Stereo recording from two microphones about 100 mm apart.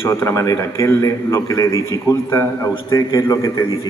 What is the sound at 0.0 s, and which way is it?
A man's voice, 25° left (ahead or behind).